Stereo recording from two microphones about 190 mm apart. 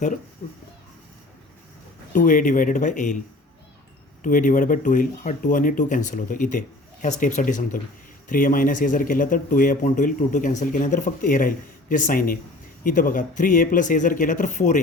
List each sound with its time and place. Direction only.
2.1 s speech: 45° left (ahead or behind)
4.2 s speech: 45° left (ahead or behind)